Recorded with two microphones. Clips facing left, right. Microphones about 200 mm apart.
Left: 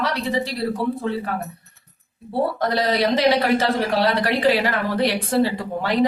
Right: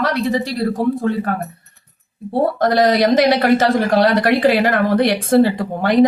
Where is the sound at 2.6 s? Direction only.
45° right (ahead or behind).